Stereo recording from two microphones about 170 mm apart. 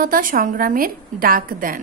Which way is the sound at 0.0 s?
55° right (ahead or behind).